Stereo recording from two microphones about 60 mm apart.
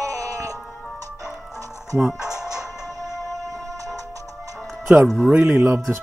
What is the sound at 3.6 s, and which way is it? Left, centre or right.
Music, right.